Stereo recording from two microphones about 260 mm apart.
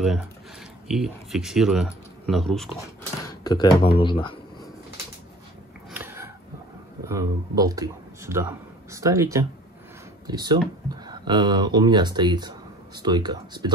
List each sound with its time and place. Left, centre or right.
0.8 s speech: centre
3.3 s speech: centre
5.9 s a sound: centre
7.1 s a man's voice: centre